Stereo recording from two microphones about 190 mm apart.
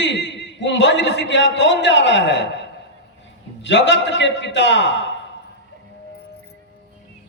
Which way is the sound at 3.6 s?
70° left (ahead or behind).